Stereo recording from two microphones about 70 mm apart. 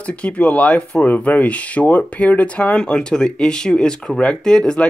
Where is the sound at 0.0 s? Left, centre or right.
Centre.